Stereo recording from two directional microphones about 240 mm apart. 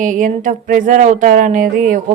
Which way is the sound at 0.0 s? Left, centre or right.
Right.